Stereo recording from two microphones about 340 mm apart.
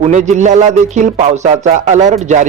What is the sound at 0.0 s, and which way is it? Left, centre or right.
Speech, right.